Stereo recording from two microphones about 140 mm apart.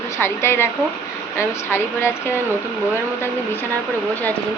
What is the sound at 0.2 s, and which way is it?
A woman's voice, 15° left (ahead or behind).